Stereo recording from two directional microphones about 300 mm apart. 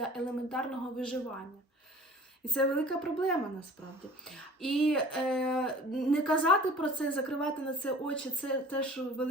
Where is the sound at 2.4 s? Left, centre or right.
Centre.